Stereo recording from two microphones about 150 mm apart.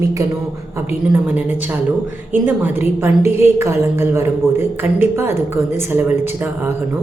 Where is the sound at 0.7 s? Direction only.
15° right (ahead or behind).